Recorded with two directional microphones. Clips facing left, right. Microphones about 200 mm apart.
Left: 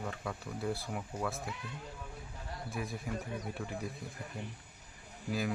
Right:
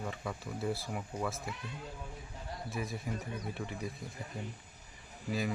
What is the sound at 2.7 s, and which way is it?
Speech, centre (ahead or behind).